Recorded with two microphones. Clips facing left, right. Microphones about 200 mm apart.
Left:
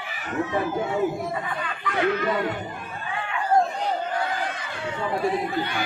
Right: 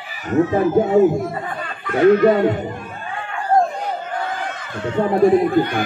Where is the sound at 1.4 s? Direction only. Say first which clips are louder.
Right 2 dB; 45° right (ahead or behind).